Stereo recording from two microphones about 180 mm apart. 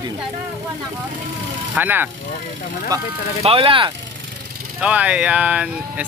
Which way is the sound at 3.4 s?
30° right (ahead or behind).